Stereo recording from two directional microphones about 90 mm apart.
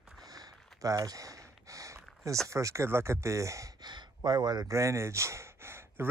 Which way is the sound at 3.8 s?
55° right (ahead or behind).